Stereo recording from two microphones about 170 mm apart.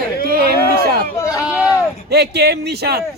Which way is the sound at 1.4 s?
5° right (ahead or behind).